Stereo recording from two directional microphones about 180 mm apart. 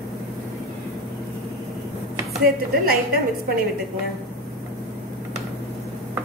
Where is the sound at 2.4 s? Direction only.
55° right (ahead or behind).